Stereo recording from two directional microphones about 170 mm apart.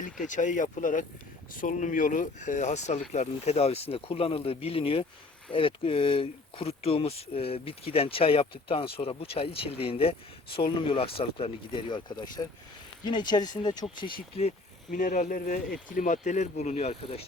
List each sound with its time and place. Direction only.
0.0 s speech: 50° left (ahead or behind); by 14.1 s 30° left (ahead or behind)
14.9 s speech: 50° left (ahead or behind)